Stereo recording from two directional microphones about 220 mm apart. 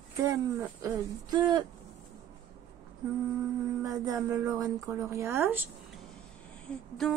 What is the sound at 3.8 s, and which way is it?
Speech, 15° right (ahead or behind).